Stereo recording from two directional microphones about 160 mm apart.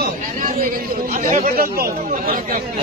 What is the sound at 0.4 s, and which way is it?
Speech, 65° right (ahead or behind).